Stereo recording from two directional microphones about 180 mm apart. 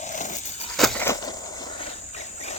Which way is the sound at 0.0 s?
45° left (ahead or behind).